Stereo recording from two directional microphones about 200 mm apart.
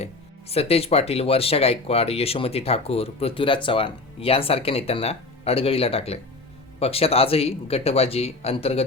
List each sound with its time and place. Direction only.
0.0 s speech: 30° left (ahead or behind)